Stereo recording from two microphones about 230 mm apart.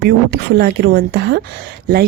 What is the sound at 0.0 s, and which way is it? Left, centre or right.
A woman's voice, right.